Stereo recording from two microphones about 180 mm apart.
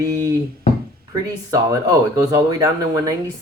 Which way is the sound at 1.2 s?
20° right (ahead or behind).